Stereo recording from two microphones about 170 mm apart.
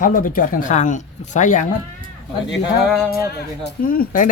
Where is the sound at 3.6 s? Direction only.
60° left (ahead or behind).